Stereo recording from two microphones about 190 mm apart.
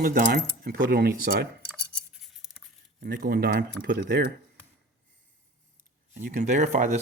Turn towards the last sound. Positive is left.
turn(degrees=-40)  # may be behind; listen again after turning